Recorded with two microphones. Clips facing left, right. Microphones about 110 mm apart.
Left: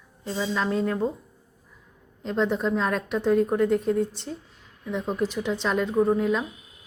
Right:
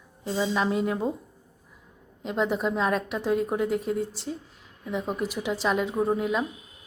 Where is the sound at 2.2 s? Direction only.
5° right (ahead or behind).